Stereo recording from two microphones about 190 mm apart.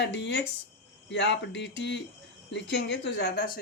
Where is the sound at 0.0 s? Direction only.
65° left (ahead or behind).